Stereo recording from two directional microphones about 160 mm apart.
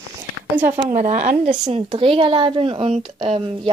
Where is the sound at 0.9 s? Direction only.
50° right (ahead or behind).